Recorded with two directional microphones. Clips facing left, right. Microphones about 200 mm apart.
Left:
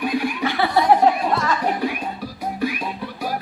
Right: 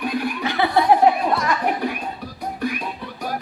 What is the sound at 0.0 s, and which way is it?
Chuckle, 10° left (ahead or behind).